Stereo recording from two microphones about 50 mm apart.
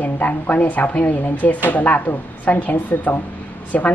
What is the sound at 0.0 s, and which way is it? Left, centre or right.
Speech, left.